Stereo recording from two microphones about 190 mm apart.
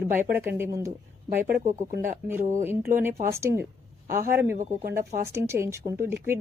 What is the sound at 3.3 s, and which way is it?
Speech, 15° right (ahead or behind).